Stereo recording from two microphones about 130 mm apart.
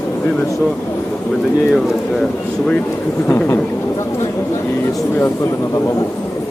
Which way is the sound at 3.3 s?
20° left (ahead or behind).